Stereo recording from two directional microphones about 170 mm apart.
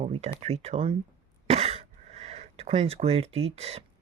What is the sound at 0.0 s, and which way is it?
Speech, 40° right (ahead or behind).